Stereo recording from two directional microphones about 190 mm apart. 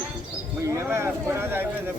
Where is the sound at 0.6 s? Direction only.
15° right (ahead or behind).